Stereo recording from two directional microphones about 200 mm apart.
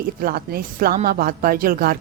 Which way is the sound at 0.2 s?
45° right (ahead or behind).